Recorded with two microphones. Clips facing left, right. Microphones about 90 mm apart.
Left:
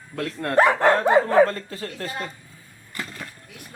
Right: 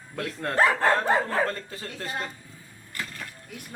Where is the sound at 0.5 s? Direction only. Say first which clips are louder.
Left 5 dB; 15° left (ahead or behind).